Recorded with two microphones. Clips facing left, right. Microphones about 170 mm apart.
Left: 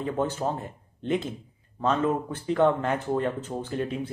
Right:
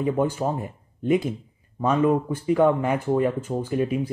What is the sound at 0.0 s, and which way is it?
Speech, 10° right (ahead or behind).